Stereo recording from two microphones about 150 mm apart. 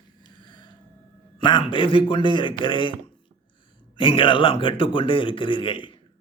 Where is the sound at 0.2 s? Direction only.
30° left (ahead or behind).